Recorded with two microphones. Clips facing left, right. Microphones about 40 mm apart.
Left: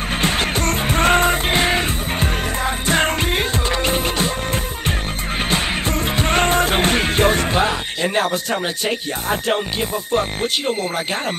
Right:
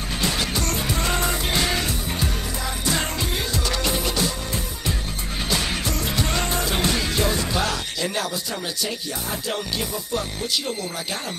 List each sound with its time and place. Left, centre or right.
0.2 s music: left
5.5 s music: left
7.6 s speech: left